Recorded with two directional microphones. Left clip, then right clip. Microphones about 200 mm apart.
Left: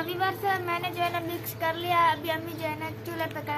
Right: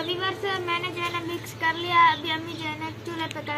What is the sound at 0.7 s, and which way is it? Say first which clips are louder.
Speech: right 1 dB; 30° left (ahead or behind).